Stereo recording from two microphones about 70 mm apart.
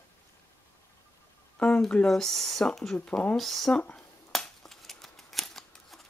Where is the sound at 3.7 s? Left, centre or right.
Centre.